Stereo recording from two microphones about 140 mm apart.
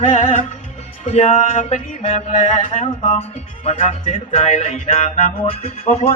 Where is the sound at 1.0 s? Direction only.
50° left (ahead or behind).